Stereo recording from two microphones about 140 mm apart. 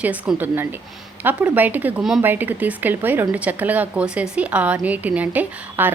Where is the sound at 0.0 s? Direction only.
10° right (ahead or behind).